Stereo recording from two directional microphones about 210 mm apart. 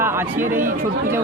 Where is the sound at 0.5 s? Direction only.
40° right (ahead or behind).